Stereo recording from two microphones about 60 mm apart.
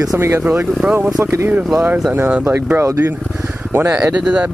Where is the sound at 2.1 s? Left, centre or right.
Right.